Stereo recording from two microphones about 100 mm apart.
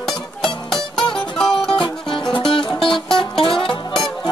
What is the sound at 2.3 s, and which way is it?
Music, 60° left (ahead or behind).